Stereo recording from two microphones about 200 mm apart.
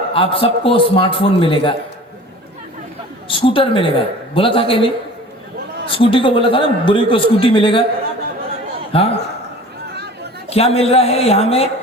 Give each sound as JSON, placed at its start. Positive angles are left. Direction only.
{"t": 0.1, "sound": "a man's voice", "side_deg": 25}
{"t": 3.2, "sound": "a man's voice", "side_deg": 25}
{"t": 8.9, "sound": "a man's voice", "side_deg": 30}
{"t": 10.5, "sound": "a man's voice", "side_deg": 30}